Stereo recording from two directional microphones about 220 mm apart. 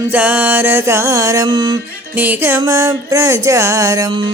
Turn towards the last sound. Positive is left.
turn(degrees=-20)  # may be behind; listen again after turning